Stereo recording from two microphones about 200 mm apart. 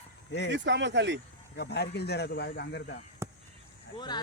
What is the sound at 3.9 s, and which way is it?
Speech, 20° left (ahead or behind).